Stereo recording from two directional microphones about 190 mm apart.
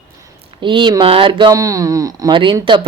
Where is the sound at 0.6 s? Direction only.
25° right (ahead or behind).